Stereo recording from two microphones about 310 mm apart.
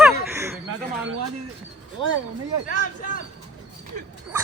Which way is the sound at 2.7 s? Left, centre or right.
Left.